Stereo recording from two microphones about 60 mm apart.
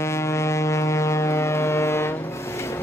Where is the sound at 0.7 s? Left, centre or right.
Left.